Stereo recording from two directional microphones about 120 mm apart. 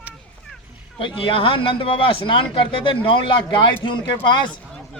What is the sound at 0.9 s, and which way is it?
Speech, 45° left (ahead or behind).